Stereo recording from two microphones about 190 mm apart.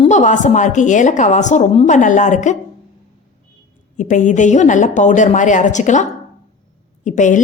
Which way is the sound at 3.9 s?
40° left (ahead or behind).